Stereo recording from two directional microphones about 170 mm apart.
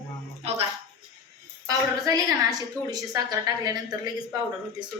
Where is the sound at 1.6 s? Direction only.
20° right (ahead or behind).